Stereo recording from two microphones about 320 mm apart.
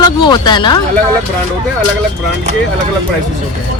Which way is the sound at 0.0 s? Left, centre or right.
Centre.